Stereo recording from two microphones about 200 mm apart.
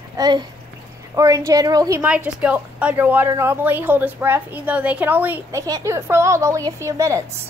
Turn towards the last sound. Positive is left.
turn(degrees=-15)  # may be behind; listen again after turning